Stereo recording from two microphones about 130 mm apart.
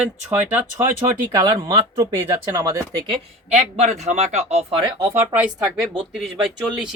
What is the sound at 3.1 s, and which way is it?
Speech, 55° right (ahead or behind).